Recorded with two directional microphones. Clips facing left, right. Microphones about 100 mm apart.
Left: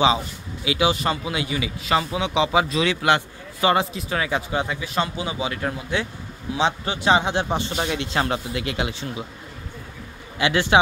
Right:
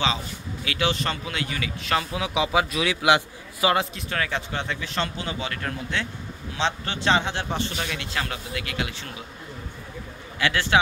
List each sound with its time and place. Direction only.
0.7 s a man's voice: 10° left (ahead or behind); by 3.7 s 10° right (ahead or behind)
3.7 s a man's voice: centre (ahead or behind); by 9.1 s 20° left (ahead or behind)
10.4 s speech: 20° left (ahead or behind)